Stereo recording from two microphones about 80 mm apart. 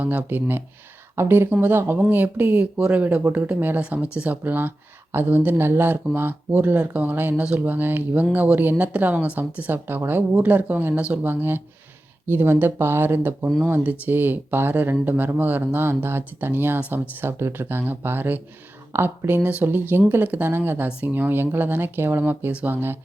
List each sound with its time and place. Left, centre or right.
0.0 s speech: right
19.4 s speech: centre